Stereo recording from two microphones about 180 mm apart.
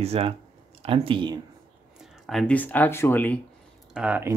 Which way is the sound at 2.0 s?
Centre (ahead or behind).